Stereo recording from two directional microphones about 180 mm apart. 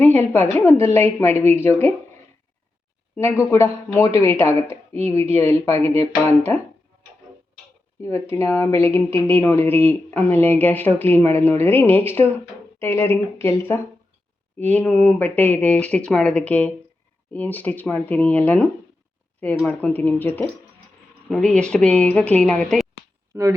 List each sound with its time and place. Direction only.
0.0 s speech: 10° left (ahead or behind)
3.2 s speech: 15° left (ahead or behind)
8.0 s speech: 15° left (ahead or behind)
23.3 s speech: 15° right (ahead or behind)